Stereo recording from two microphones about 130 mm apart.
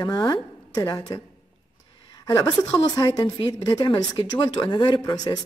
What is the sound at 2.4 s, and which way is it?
A woman's voice, 30° left (ahead or behind).